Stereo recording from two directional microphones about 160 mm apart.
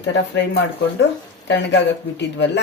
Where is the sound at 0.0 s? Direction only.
90° left.